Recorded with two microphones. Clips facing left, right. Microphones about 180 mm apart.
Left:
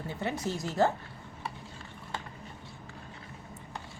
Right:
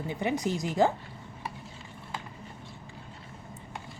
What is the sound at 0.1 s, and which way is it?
Speech, 15° right (ahead or behind).